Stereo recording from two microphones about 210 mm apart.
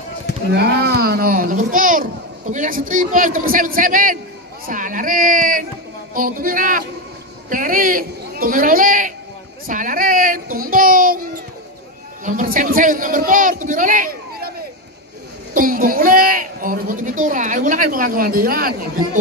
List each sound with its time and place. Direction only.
0.5 s a child's voice: 50° right (ahead or behind)
12.3 s a woman's voice: 35° right (ahead or behind)
15.5 s a woman's voice: 40° right (ahead or behind)